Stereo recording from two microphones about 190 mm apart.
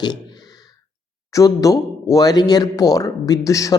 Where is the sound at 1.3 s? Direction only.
15° left (ahead or behind).